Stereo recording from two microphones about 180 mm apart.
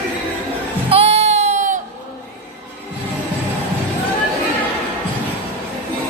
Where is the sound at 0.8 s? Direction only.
35° right (ahead or behind).